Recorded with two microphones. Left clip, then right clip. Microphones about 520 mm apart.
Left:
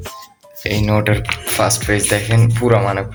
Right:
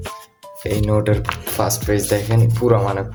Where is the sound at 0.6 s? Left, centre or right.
Right.